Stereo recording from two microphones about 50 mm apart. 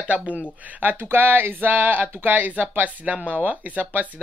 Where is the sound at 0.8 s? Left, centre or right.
Right.